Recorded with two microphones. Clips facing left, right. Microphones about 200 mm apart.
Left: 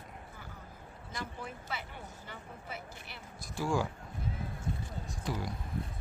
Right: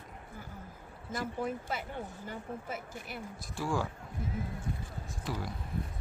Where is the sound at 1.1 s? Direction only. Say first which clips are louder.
Right 8 dB; 45° right (ahead or behind).